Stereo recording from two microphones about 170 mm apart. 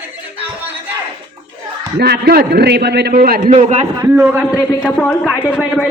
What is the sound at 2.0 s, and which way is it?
A man's voice, 70° right (ahead or behind).